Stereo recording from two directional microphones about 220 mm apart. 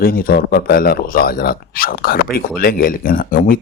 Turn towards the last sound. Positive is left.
turn(degrees=40)  # may be behind; listen again after turning